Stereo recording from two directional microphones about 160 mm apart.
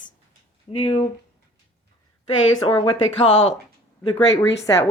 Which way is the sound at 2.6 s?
30° left (ahead or behind).